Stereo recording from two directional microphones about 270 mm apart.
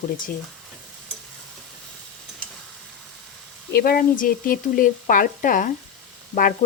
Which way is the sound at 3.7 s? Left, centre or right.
Left.